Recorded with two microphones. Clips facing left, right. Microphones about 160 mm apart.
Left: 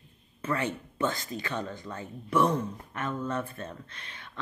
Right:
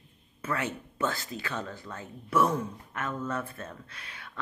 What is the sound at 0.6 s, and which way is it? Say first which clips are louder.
Speech: left 1 dB; 5° right (ahead or behind).